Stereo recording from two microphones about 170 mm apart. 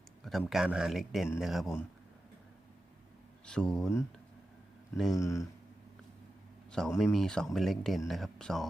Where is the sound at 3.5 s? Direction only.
5° left (ahead or behind).